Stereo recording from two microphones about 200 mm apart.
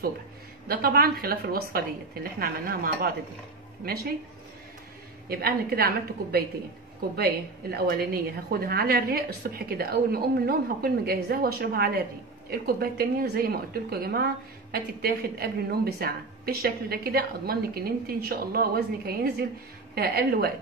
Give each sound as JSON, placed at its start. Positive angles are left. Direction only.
{"t": 0.7, "sound": "a woman's voice", "side_deg": -50}
{"t": 5.3, "sound": "a woman's voice", "side_deg": -50}
{"t": 7.2, "sound": "a woman's voice", "side_deg": -50}